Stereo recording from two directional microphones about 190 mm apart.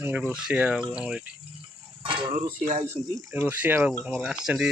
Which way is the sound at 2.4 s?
40° right (ahead or behind).